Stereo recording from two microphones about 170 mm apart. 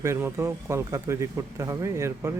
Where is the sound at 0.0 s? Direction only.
15° right (ahead or behind).